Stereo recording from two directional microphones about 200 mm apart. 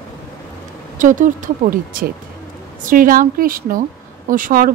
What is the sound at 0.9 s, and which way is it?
A woman's voice, 40° right (ahead or behind).